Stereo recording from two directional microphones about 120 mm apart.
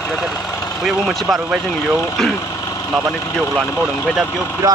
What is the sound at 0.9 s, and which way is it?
Speech, 5° right (ahead or behind).